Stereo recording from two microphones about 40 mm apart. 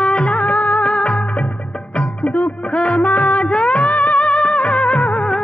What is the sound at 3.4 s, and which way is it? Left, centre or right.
Music, left.